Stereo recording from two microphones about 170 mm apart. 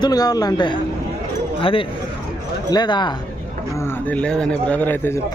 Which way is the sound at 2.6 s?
25° left (ahead or behind).